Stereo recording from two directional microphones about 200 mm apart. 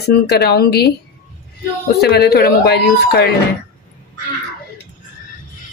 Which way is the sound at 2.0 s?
55° left (ahead or behind).